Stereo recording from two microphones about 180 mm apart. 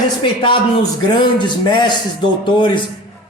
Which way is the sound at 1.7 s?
25° left (ahead or behind).